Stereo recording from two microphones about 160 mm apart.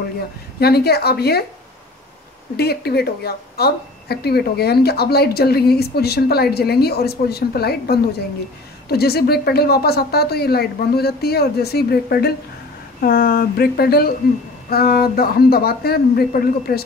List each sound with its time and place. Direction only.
0.6 s a woman's voice: 85° left
2.5 s a woman's voice: 80° left